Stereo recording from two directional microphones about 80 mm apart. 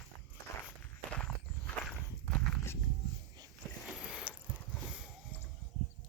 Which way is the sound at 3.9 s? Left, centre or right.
Centre.